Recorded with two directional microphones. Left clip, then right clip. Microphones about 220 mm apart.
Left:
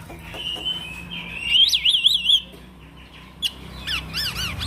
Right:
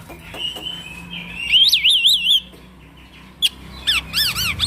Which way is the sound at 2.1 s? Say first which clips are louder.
Right 3 dB; 15° right (ahead or behind).